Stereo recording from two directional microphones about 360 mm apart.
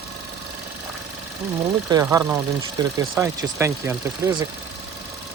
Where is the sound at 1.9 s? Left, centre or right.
Centre.